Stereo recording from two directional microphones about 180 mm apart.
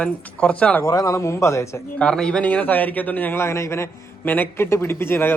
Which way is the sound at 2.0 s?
5° left (ahead or behind).